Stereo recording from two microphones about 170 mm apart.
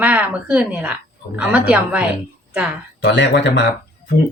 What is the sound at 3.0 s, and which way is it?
Speech, 90° left.